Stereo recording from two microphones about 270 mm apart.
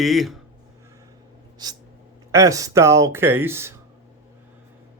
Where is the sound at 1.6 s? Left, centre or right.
Centre.